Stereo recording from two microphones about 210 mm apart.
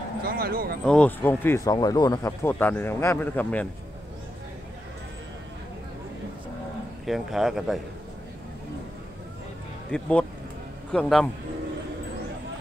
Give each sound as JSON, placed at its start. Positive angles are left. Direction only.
{"t": 0.2, "sound": "speech", "side_deg": -45}
{"t": 0.8, "sound": "speech", "side_deg": 5}
{"t": 7.1, "sound": "a man's voice", "side_deg": 0}
{"t": 9.8, "sound": "a man's voice", "side_deg": 5}